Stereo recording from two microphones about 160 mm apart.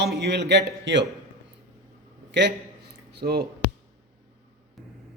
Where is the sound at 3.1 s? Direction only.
90° right.